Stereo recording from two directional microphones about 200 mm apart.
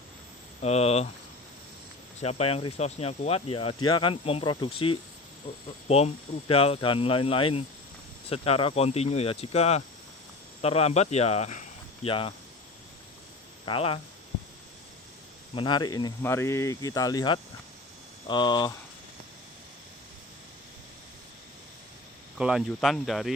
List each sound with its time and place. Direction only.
0.6 s speech: 30° left (ahead or behind)
2.2 s speech: 30° left (ahead or behind)
6.5 s speech: 30° left (ahead or behind)
13.7 s speech: 30° left (ahead or behind)
15.5 s speech: 20° left (ahead or behind)
22.4 s speech: 5° right (ahead or behind)